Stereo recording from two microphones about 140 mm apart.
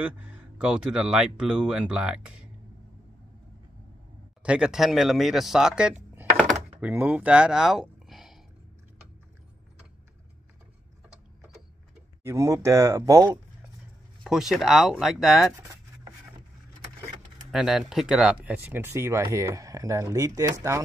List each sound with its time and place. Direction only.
0.0 s speech: 10° right (ahead or behind)
4.4 s speech: 5° right (ahead or behind)
12.2 s speech: 20° right (ahead or behind)
14.2 s speech: 5° right (ahead or behind)
17.5 s speech: centre (ahead or behind); by 20.8 s 20° right (ahead or behind)